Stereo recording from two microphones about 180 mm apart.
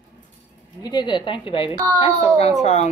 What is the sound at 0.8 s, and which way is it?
A woman's voice, 25° left (ahead or behind).